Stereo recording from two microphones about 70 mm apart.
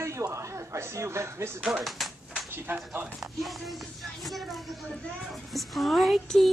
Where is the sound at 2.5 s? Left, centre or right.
Right.